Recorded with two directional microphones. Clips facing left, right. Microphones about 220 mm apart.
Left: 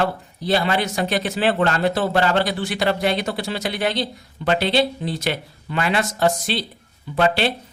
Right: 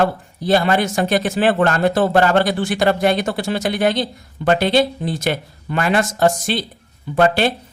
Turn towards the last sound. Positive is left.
turn(degrees=-45)  # may be behind; listen again after turning